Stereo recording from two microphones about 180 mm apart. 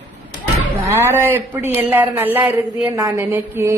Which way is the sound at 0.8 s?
15° right (ahead or behind).